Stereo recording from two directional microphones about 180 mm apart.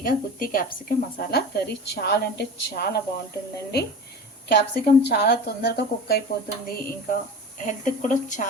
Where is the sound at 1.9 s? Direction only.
65° left (ahead or behind).